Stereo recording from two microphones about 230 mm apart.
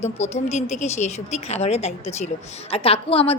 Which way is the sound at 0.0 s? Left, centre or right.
Left.